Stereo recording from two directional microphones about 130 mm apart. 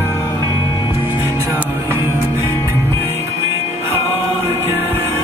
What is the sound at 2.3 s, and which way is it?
Music, 20° left (ahead or behind).